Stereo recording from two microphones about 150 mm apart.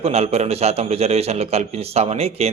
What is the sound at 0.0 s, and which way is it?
A man's voice, 45° right (ahead or behind).